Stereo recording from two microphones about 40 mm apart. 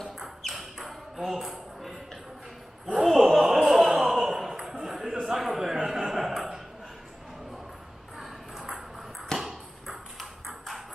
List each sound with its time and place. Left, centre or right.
0.6 s ping: centre
2.9 s a sound: centre
8.2 s ping: centre
9.3 s ping: centre